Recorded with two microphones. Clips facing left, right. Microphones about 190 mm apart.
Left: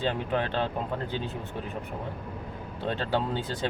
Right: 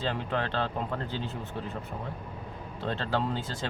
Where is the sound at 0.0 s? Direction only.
15° left (ahead or behind).